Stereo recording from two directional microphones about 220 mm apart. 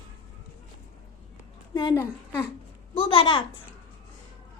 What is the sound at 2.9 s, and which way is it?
Speech, 25° left (ahead or behind).